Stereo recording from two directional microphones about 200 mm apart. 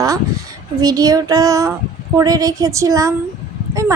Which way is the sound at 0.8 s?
20° right (ahead or behind).